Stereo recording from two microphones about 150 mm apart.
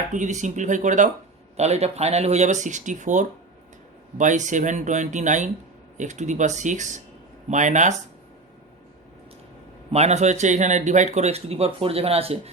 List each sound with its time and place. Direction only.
0.1 s speech: 55° right (ahead or behind)
9.9 s speech: 50° right (ahead or behind)